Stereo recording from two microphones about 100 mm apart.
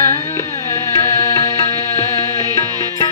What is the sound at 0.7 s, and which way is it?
Music, 30° left (ahead or behind).